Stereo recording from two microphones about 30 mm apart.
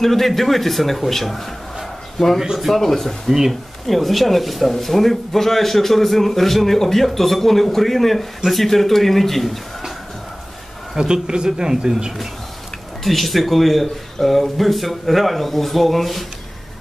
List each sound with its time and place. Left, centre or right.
0.0 s speech: centre
2.6 s speech: centre
3.3 s speech: centre
3.8 s speech: centre
11.0 s speech: right
13.0 s speech: centre